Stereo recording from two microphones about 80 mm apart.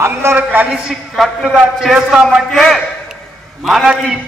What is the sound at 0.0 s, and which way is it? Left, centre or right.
Speech, right.